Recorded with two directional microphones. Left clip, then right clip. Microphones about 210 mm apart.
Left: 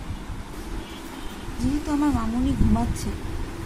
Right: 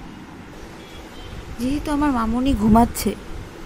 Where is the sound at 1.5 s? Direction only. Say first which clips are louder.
Right 3 dB; 20° right (ahead or behind).